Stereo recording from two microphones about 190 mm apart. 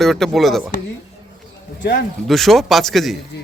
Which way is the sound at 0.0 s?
Centre (ahead or behind).